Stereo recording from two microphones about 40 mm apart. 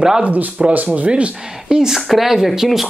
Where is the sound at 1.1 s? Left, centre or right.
Right.